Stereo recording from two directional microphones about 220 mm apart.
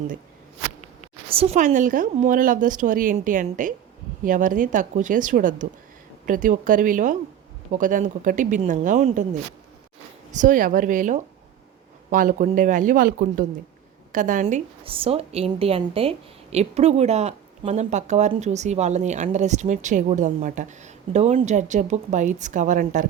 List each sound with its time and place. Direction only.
1.3 s a woman's voice: 25° right (ahead or behind)
10.3 s a woman's voice: 35° right (ahead or behind)